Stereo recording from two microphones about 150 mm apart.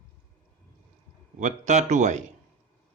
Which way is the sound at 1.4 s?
50° right (ahead or behind).